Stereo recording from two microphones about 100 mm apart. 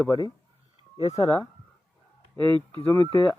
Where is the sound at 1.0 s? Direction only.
35° left (ahead or behind).